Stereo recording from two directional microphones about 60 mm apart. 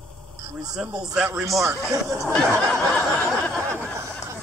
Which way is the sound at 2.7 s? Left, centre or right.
Centre.